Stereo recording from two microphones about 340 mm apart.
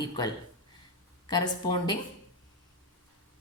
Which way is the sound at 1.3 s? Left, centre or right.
Centre.